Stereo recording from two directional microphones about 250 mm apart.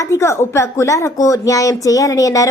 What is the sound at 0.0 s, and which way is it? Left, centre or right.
A woman's voice, centre.